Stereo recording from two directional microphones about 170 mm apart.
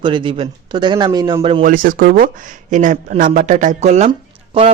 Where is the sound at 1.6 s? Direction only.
55° right (ahead or behind).